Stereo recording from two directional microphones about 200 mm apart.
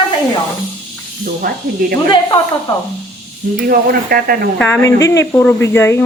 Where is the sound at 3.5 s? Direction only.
45° right (ahead or behind).